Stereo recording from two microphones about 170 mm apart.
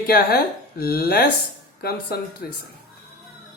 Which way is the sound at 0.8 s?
65° left (ahead or behind).